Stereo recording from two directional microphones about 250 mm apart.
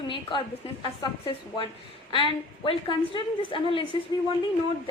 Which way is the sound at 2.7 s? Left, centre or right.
Centre.